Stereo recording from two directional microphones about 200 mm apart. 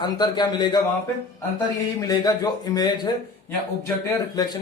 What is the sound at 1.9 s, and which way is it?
Speech, 20° left (ahead or behind).